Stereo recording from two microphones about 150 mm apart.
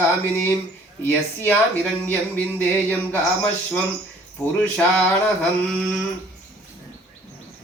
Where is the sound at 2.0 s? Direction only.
10° left (ahead or behind).